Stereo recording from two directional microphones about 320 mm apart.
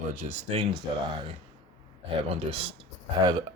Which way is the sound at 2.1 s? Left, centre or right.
Centre.